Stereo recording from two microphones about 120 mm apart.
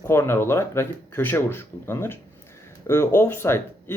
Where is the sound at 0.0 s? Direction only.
20° left (ahead or behind).